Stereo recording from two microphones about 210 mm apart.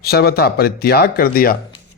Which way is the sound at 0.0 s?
50° left (ahead or behind).